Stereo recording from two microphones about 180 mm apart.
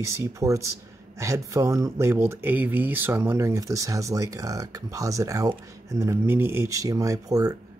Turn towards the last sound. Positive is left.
turn(degrees=-20)  # may be behind; listen again after turning